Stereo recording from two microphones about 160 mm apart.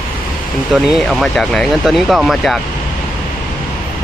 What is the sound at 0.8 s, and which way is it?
Speech, centre (ahead or behind).